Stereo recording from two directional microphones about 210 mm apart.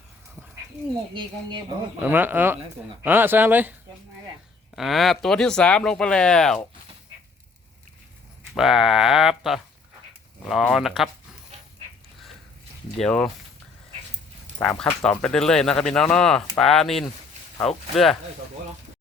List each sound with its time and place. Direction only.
1.1 s speech: 20° right (ahead or behind)
2.0 s speech: 10° right (ahead or behind)
8.5 s speech: centre (ahead or behind)
13.0 s speech: 5° left (ahead or behind)
14.6 s speech: 5° left (ahead or behind)